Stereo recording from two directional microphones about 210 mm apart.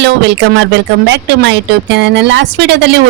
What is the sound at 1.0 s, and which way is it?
A woman's voice, 55° right (ahead or behind).